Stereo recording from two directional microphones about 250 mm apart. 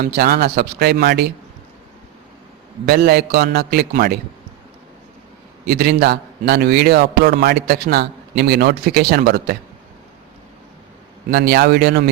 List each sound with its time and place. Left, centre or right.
0.0 s a man's voice: right
2.8 s a man's voice: right
5.6 s a man's voice: right
11.3 s a man's voice: right